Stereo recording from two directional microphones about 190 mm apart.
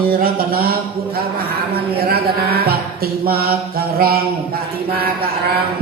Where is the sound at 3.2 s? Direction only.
50° right (ahead or behind).